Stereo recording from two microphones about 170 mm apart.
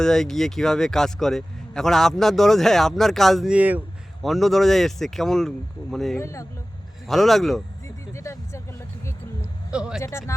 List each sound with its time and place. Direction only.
0.0 s a man's voice: 5° left (ahead or behind)
6.1 s speech: 15° left (ahead or behind)
7.1 s a man's voice: centre (ahead or behind)
8.1 s speech: 15° left (ahead or behind)
9.7 s a man's voice: 5° right (ahead or behind)
10.0 s speech: 15° left (ahead or behind)